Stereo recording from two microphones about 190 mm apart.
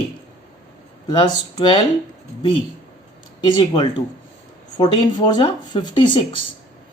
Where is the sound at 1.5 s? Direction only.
25° left (ahead or behind).